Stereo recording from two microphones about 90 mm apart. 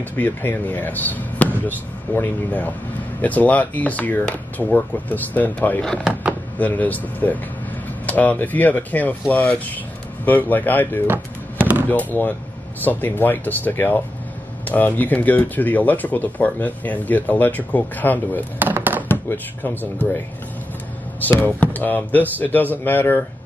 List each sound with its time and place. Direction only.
0.1 s speech: 25° left (ahead or behind)
18.6 s a sound: 25° right (ahead or behind)
19.0 s speech: 20° left (ahead or behind)
21.4 s speech: 20° left (ahead or behind)